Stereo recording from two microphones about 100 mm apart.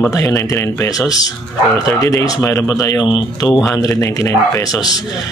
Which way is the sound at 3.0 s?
50° left (ahead or behind).